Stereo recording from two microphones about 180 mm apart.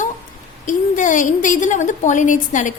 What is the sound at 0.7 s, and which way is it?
A woman's voice, 45° left (ahead or behind).